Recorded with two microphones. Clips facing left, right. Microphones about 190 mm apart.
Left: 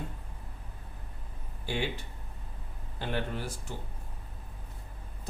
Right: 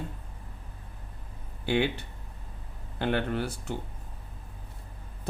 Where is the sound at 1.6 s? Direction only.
65° right (ahead or behind).